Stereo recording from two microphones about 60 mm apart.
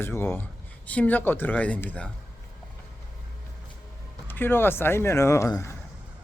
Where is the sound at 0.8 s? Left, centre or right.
Left.